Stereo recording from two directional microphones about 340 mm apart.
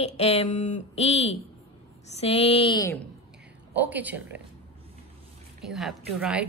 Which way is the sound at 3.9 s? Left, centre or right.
Centre.